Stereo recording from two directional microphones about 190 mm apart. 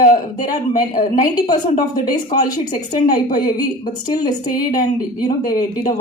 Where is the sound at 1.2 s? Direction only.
20° left (ahead or behind).